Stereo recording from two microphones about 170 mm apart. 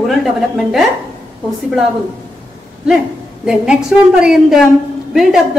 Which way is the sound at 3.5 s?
5° right (ahead or behind).